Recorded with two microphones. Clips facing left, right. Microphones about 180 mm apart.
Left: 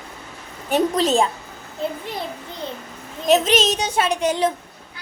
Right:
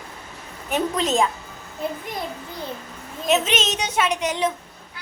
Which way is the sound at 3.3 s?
35° left (ahead or behind).